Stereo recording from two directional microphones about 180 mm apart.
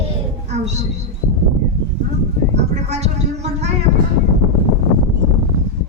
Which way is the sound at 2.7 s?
40° right (ahead or behind).